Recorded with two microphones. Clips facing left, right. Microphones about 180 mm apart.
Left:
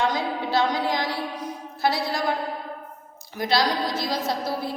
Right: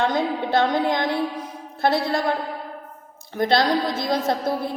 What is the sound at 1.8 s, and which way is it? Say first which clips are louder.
Speech: right 4 dB; 55° right (ahead or behind).